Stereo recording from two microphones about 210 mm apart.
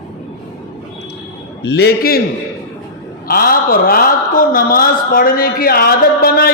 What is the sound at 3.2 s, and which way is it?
Speech, 45° left (ahead or behind).